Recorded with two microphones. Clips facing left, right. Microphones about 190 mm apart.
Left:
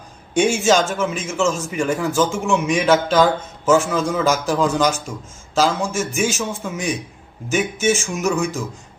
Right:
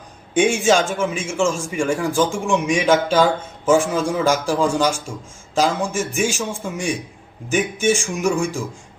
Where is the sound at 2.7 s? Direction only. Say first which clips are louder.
Even; 10° right (ahead or behind).